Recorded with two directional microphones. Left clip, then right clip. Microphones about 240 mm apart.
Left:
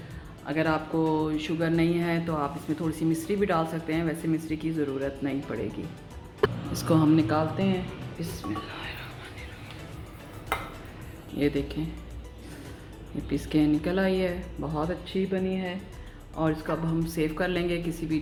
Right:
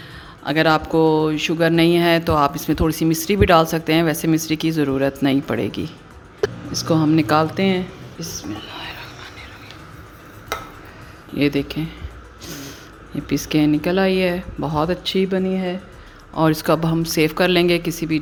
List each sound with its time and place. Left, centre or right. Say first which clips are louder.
0.4 s speech: right 10 dB; right
6.7 s speech: right 6 dB; centre
7.3 s speech: right 10 dB; right
8.7 s pig: right 6 dB; right
11.3 s speech: right 8 dB; right
13.3 s speech: right 7 dB; right